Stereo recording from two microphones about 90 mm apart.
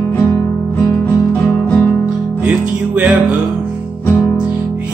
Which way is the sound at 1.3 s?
20° left (ahead or behind).